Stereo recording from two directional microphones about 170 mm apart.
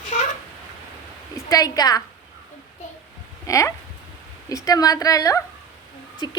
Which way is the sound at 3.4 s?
20° left (ahead or behind).